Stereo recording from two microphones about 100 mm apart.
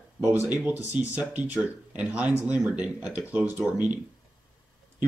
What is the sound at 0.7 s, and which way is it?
Speech, 15° right (ahead or behind).